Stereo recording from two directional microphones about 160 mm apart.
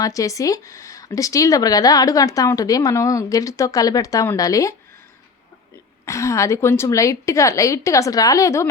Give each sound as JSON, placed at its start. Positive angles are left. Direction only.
{"t": 0.0, "sound": "speech", "side_deg": 20}
{"t": 6.1, "sound": "speech", "side_deg": 20}